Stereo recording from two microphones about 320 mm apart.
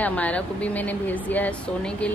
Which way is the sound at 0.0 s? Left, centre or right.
Centre.